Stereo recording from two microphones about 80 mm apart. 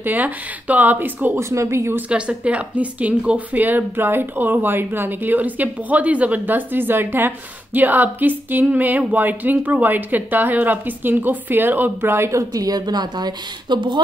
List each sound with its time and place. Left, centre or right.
0.0 s speech: right
1.4 s speech: right
2.0 s speech: centre; by 13.9 s right